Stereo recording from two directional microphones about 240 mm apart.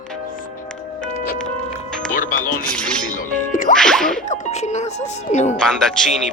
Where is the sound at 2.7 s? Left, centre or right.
Centre.